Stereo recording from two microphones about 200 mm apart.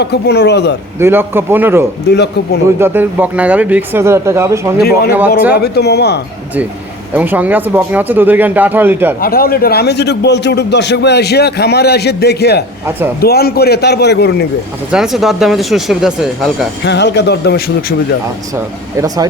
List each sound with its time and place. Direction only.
0.0 s a man's voice: 55° left (ahead or behind)
0.9 s speech: 10° right (ahead or behind)
2.0 s a man's voice: 55° left (ahead or behind)
2.7 s speech: 10° right (ahead or behind)
4.8 s a man's voice: 50° left (ahead or behind)
7.1 s speech: 10° right (ahead or behind)
9.2 s a man's voice: 45° left (ahead or behind)
14.8 s speech: centre (ahead or behind)
16.8 s a man's voice: 60° left (ahead or behind)
18.9 s speech: 20° right (ahead or behind)